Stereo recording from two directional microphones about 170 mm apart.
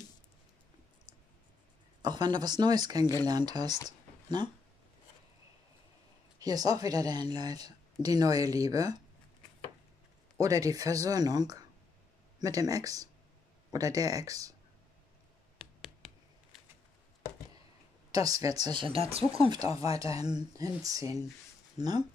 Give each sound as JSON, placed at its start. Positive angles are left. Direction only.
{"t": 2.0, "sound": "a woman's voice", "side_deg": -25}
{"t": 6.4, "sound": "a woman's voice", "side_deg": -20}
{"t": 10.4, "sound": "a woman's voice", "side_deg": -20}
{"t": 15.5, "sound": "a sound", "side_deg": -5}
{"t": 18.1, "sound": "a woman's voice", "side_deg": -20}
{"t": 19.4, "sound": "a woman's voice", "side_deg": -25}